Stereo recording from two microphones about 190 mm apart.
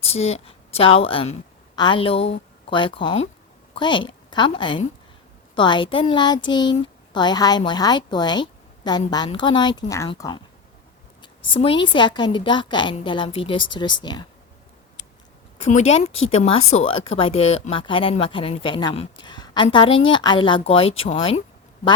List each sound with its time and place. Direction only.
0.0 s a woman's voice: 35° left (ahead or behind)
15.7 s speech: 35° left (ahead or behind)